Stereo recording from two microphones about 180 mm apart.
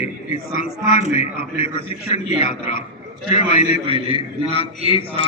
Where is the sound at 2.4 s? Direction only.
35° left (ahead or behind).